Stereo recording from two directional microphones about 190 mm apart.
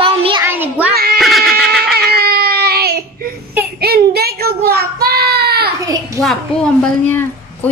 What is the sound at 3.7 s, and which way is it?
Child singing, 55° right (ahead or behind).